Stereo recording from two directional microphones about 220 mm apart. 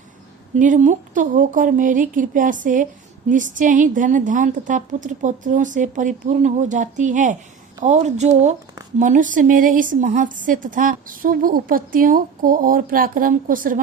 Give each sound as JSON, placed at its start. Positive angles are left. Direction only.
{"t": 0.5, "sound": "speech", "side_deg": -35}